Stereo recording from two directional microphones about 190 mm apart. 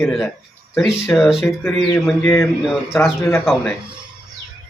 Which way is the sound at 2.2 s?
15° left (ahead or behind).